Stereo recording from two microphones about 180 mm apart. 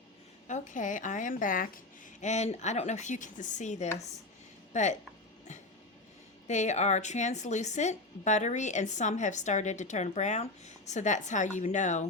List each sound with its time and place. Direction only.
0.4 s a woman's voice: 45° left (ahead or behind)
2.2 s a woman's voice: 40° left (ahead or behind)
6.5 s a woman's voice: 40° left (ahead or behind)